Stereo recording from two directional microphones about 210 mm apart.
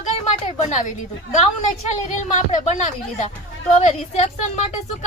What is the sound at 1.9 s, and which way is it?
Speech, 35° left (ahead or behind).